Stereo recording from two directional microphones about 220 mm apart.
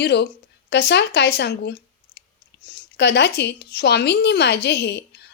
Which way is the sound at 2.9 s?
50° left (ahead or behind).